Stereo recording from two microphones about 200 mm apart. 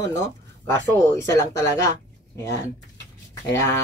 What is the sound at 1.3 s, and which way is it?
Speech, 15° left (ahead or behind).